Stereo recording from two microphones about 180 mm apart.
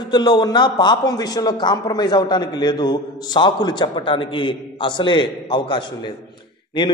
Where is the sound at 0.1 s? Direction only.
25° left (ahead or behind).